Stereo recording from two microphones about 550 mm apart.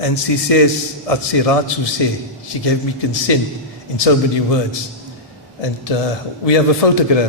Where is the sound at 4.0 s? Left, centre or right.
Left.